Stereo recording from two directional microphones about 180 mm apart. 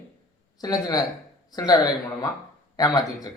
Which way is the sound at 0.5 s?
20° left (ahead or behind).